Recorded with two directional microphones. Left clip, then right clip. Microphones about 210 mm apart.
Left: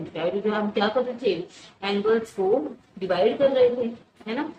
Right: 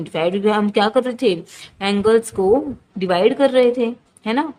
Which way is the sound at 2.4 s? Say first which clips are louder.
Right 7 dB; 75° right (ahead or behind).